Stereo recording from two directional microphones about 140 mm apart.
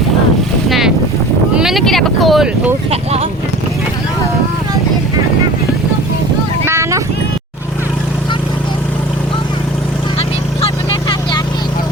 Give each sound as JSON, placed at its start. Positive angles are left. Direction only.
{"t": 0.7, "sound": "boat", "side_deg": 0}
{"t": 1.5, "sound": "a sound", "side_deg": 0}
{"t": 2.9, "sound": "speech", "side_deg": -45}
{"t": 6.7, "sound": "clip-clop", "side_deg": -20}